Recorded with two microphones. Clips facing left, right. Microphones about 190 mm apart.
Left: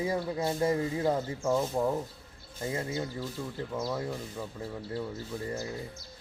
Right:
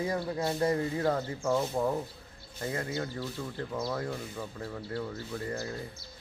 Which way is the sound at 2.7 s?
20° left (ahead or behind).